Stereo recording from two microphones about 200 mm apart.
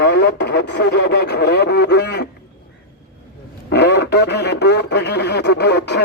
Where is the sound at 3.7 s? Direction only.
60° left (ahead or behind).